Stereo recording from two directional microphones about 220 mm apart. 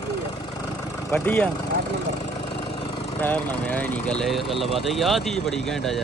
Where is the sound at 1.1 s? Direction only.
5° left (ahead or behind).